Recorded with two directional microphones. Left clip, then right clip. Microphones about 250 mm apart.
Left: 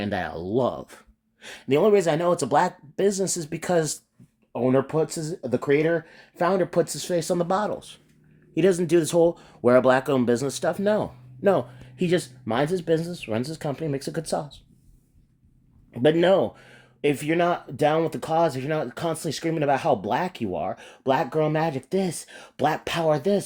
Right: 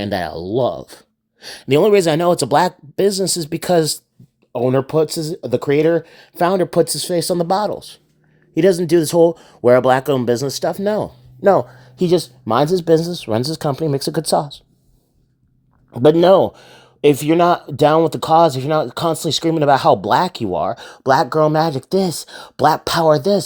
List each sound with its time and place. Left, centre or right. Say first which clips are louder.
0.0 s speech: right 7 dB; right
1.6 s speech: right 7 dB; right
15.9 s speech: right 8 dB; right